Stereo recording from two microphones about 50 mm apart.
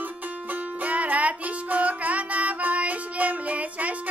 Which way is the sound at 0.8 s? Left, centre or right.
Right.